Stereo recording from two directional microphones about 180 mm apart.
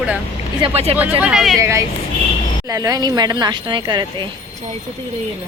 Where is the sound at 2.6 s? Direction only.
20° right (ahead or behind).